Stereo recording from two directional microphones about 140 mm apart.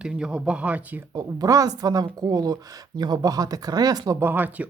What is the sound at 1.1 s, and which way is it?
Speech, 25° right (ahead or behind).